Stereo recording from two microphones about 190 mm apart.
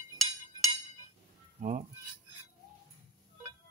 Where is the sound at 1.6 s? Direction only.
40° right (ahead or behind).